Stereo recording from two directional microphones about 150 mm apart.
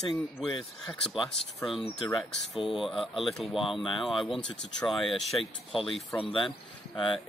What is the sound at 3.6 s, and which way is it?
Speech, 35° left (ahead or behind).